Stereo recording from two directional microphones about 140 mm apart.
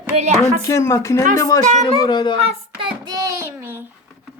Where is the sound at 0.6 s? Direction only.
20° left (ahead or behind).